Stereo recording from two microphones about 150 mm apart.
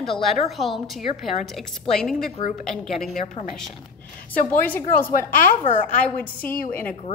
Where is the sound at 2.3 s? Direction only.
55° left (ahead or behind).